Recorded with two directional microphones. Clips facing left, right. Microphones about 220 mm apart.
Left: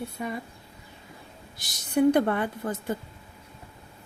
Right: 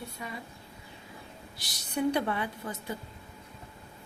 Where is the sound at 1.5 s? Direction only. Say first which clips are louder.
Left 8 dB; 50° left (ahead or behind).